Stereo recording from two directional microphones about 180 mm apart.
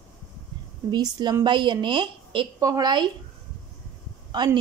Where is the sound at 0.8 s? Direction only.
20° right (ahead or behind).